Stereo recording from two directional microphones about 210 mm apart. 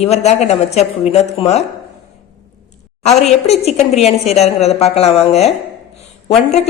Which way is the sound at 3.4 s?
30° left (ahead or behind).